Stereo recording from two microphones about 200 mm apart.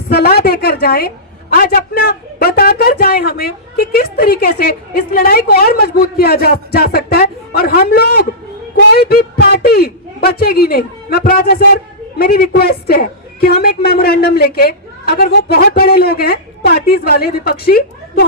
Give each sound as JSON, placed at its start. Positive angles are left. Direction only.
{"t": 0.1, "sound": "a woman's voice", "side_deg": 50}